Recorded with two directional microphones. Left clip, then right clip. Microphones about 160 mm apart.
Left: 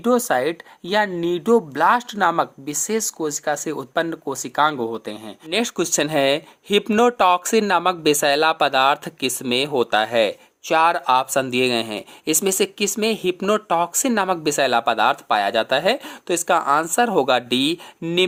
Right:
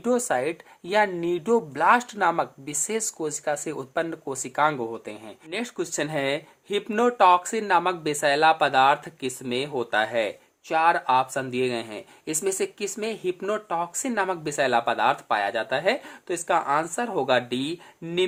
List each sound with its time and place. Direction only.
0.0 s speech: 25° left (ahead or behind)
5.5 s speech: 50° left (ahead or behind)